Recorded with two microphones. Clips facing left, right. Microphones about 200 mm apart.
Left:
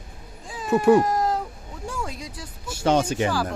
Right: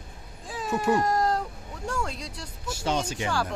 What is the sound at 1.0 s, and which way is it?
Cat, 5° left (ahead or behind).